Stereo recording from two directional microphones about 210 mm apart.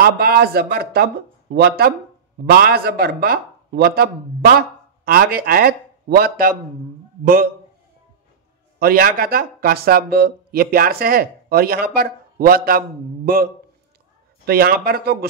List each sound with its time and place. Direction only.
0.0 s speech: 45° right (ahead or behind)
8.7 s speech: 45° right (ahead or behind)